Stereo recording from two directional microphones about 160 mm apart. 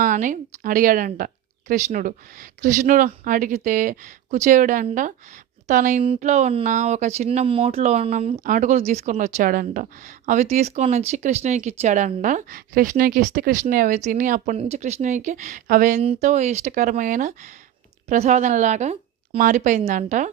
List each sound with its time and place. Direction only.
0.0 s speech: 55° right (ahead or behind)
10.2 s speech: 45° right (ahead or behind)
14.6 s speech: 45° right (ahead or behind)